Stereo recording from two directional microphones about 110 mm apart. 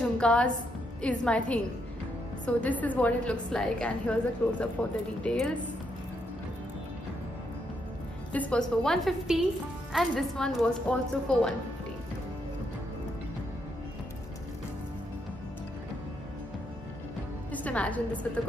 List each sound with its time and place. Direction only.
0.0 s music: 10° left (ahead or behind)
1.0 s a woman's voice: 10° left (ahead or behind)
8.3 s a woman's voice: 10° left (ahead or behind)
17.5 s a woman's voice: 15° left (ahead or behind)